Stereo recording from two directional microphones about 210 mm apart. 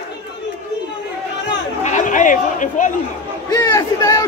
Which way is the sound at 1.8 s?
35° left (ahead or behind).